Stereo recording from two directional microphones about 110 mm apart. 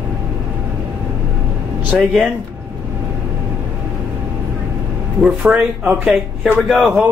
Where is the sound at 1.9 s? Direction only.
5° right (ahead or behind).